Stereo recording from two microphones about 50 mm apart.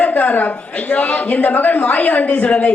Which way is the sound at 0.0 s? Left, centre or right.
Left.